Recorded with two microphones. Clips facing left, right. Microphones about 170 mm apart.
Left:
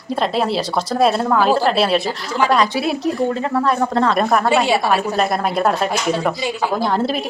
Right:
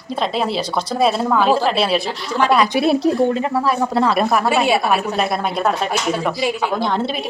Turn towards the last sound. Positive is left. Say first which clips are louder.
# left 1 dB
turn(degrees=5)  # may be behind; listen again after turning